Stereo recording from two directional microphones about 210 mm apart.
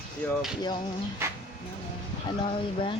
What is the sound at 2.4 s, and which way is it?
Speech, 25° left (ahead or behind).